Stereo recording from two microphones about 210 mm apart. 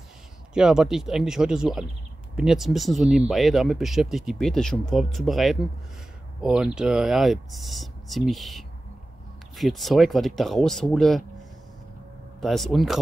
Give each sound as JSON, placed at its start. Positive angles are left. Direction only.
{"t": 0.6, "sound": "speech", "side_deg": -5}
{"t": 12.4, "sound": "speech", "side_deg": 0}